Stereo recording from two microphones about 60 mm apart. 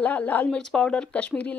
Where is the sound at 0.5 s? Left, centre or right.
Centre.